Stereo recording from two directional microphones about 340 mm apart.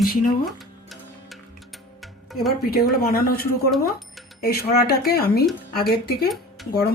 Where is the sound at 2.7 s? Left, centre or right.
Left.